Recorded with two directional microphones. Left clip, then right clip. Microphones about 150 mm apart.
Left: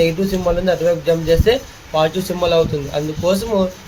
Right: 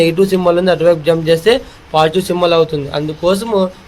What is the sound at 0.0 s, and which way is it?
A man's voice, 70° right (ahead or behind).